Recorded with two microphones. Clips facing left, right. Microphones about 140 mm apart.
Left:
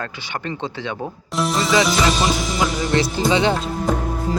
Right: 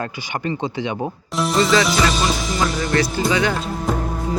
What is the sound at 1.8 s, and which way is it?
Speech, centre (ahead or behind).